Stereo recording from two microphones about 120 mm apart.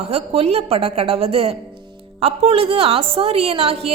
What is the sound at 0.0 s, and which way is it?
A woman's voice, 60° right (ahead or behind).